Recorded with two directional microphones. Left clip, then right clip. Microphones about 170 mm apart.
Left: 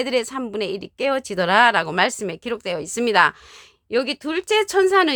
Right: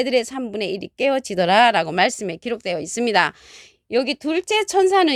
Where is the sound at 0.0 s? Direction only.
15° right (ahead or behind).